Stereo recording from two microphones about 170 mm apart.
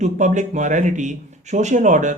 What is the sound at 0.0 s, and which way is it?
Speech, 45° right (ahead or behind).